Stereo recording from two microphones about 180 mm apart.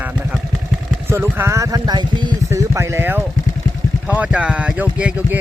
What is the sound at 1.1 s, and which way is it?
Speech, 15° right (ahead or behind).